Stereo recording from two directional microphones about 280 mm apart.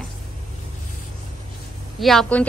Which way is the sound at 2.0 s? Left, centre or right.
Centre.